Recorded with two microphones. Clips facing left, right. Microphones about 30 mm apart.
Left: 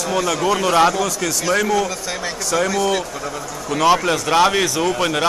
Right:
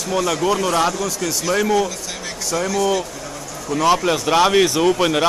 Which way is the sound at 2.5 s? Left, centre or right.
Left.